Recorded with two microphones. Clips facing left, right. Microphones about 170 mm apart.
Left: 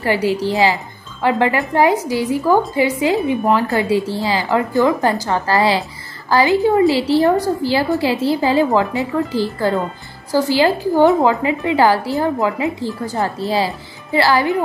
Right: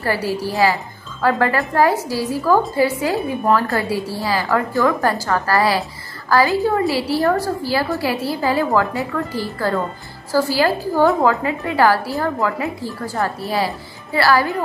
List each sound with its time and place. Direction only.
0.0 s a woman's voice: 20° left (ahead or behind)